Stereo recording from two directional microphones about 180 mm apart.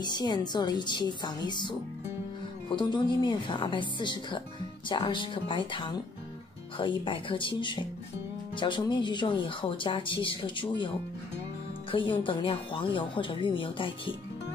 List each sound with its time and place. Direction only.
0.0 s speech: 25° left (ahead or behind)
11.9 s speech: 30° left (ahead or behind)